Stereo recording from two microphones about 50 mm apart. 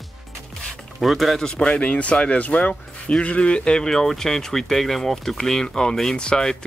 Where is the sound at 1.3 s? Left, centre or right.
Centre.